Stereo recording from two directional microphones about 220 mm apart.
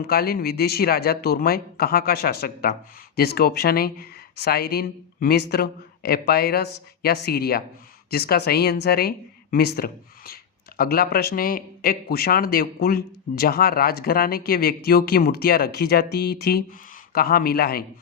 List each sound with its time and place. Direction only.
0.1 s a man's voice: 45° left (ahead or behind)